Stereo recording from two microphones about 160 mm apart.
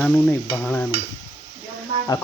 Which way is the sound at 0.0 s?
10° left (ahead or behind).